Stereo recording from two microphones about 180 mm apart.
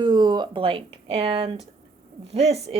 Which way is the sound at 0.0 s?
25° right (ahead or behind).